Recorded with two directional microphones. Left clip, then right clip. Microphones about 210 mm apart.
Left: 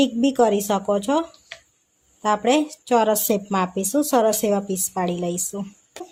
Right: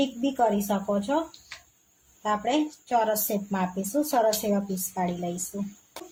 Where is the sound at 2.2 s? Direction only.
50° left (ahead or behind).